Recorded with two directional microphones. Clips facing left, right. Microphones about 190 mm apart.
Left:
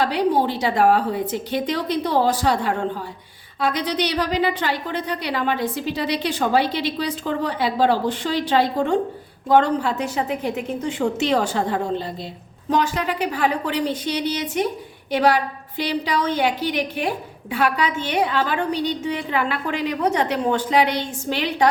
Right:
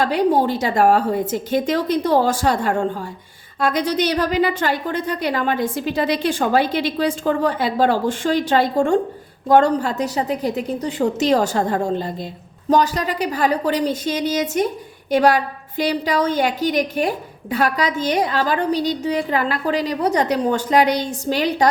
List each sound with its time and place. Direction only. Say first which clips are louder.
0.0 s a woman's voice: right 2 dB; 45° right (ahead or behind)